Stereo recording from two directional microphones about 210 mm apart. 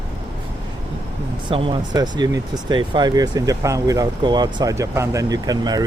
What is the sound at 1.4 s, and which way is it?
Speech, 25° right (ahead or behind).